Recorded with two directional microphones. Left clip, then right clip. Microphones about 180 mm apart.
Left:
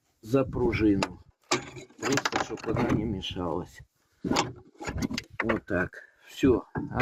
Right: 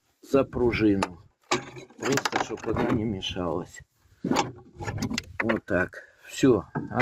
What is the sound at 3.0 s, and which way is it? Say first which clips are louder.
Speech: right 2 dB; 45° right (ahead or behind).